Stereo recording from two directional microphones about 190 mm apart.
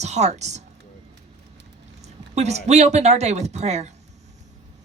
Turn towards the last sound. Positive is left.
turn(degrees=-35)  # may be behind; listen again after turning